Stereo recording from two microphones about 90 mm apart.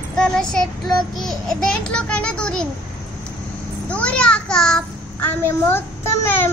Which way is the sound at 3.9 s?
15° left (ahead or behind).